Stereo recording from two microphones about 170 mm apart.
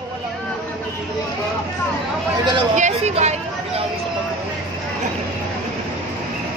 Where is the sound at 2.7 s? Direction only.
45° right (ahead or behind).